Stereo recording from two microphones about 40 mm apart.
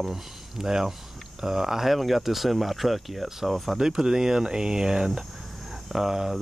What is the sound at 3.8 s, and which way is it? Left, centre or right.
Speech, centre.